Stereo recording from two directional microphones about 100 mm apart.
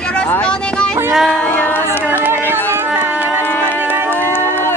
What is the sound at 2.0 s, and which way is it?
Speech, 20° right (ahead or behind).